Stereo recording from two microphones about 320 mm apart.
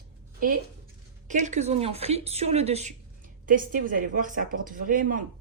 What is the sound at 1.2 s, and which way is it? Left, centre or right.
A woman's voice, right.